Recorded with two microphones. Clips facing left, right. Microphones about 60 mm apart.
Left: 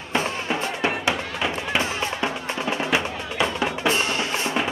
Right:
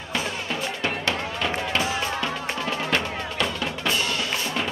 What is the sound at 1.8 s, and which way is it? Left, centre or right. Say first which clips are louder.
Music: left 2 dB; left.